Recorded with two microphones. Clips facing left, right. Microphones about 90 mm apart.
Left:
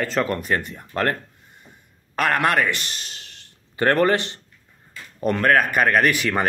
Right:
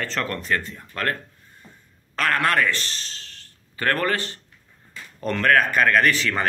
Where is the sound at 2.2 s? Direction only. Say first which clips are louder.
Left 2 dB; 15° left (ahead or behind).